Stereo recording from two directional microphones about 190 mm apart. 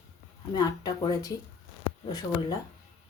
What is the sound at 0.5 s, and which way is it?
Speech, 20° left (ahead or behind).